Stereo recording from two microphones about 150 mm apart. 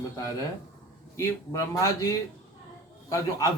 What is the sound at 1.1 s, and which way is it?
A man's voice, 20° left (ahead or behind).